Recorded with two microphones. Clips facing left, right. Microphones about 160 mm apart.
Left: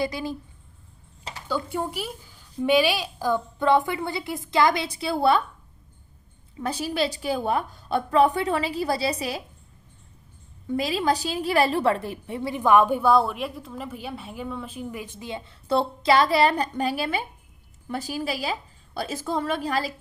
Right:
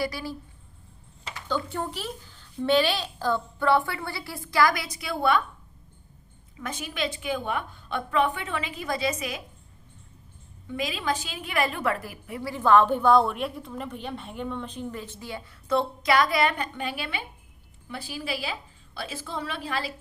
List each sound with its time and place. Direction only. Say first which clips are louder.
0.0 s a woman's voice: left 3 dB; 20° left (ahead or behind)
1.5 s a woman's voice: left 2 dB; 10° left (ahead or behind); by 5.4 s 30° left (ahead or behind)
6.6 s a woman's voice: left 6 dB; 35° left (ahead or behind)
10.7 s a woman's voice: left 5 dB; 35° left (ahead or behind)